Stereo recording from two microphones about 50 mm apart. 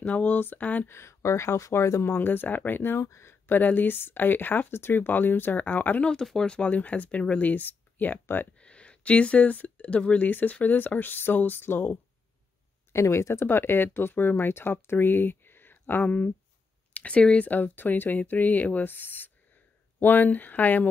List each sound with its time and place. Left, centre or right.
0.0 s speech: left
0.8 s speech: left
2.0 s speech: left
3.0 s speech: left
3.4 s speech: left
6.3 s speech: centre; by 8.2 s left
8.5 s speech: left
12.9 s speech: left
16.1 s speech: left
17.5 s speech: left